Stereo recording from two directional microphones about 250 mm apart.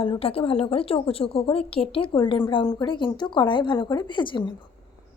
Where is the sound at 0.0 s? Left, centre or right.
Left.